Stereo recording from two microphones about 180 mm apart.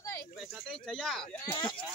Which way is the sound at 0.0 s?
15° left (ahead or behind).